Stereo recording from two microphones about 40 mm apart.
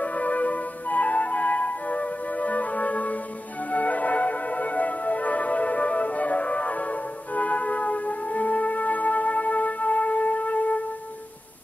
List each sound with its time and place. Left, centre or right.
0.0 s music: left